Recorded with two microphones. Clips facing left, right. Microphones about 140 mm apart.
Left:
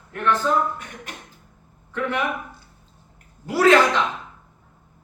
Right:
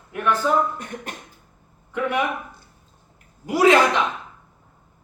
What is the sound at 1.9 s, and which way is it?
Speech, 15° right (ahead or behind).